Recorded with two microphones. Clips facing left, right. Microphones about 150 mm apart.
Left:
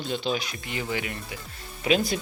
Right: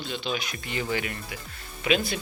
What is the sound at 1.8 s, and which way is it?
Speech, 35° left (ahead or behind).